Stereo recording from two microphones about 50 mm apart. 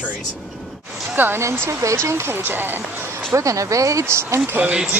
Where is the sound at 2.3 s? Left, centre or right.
Right.